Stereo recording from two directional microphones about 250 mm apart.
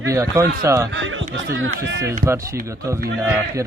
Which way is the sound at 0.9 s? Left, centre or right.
Right.